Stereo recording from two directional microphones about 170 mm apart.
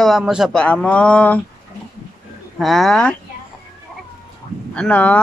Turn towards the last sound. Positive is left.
turn(degrees=10)  # may be behind; listen again after turning